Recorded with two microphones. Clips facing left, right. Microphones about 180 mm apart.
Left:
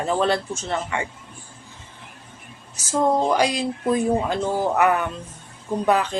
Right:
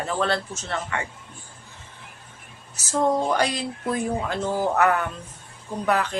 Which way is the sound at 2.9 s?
10° left (ahead or behind).